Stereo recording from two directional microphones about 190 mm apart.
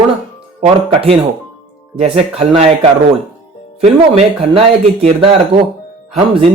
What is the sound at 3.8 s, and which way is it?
Speech, 35° right (ahead or behind).